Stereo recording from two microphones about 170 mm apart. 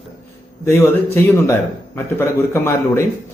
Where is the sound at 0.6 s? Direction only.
15° left (ahead or behind).